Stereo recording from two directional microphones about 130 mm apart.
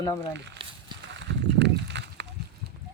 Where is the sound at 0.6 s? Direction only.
45° right (ahead or behind).